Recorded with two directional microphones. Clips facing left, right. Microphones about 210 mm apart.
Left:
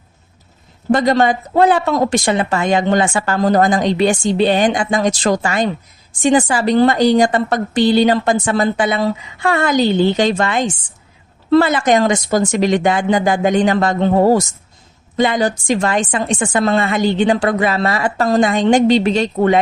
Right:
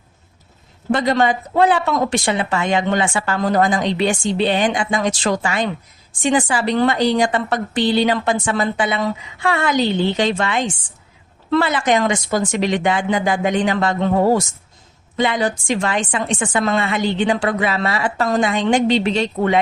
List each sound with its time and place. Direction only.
0.9 s a woman's voice: 40° left (ahead or behind)